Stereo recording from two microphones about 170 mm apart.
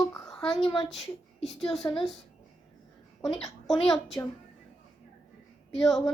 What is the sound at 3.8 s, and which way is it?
Speech, centre (ahead or behind).